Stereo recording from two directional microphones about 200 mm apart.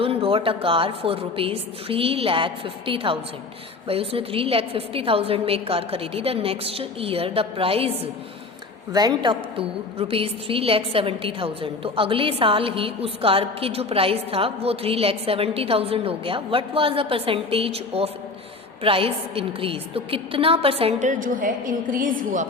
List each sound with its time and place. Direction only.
0.0 s a woman's voice: 30° right (ahead or behind)